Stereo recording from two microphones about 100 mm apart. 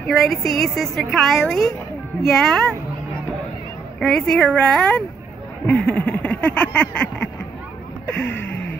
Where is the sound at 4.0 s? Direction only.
5° left (ahead or behind).